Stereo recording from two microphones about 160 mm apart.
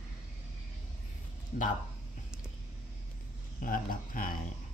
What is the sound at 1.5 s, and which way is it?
Speech, 55° left (ahead or behind).